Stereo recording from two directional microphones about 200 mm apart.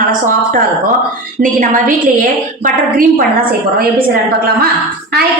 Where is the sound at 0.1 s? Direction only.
45° right (ahead or behind).